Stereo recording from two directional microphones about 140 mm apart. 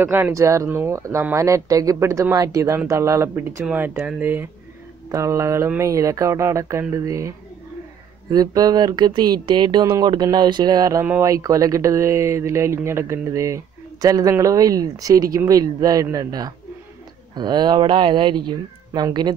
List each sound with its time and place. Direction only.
0.0 s speech: 15° right (ahead or behind); by 19.3 s 30° right (ahead or behind)